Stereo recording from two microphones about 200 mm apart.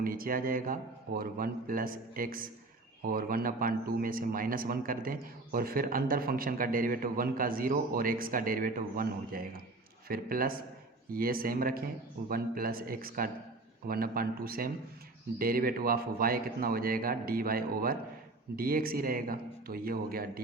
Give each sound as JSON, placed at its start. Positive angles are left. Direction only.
{"t": 0.0, "sound": "a man's voice", "side_deg": -45}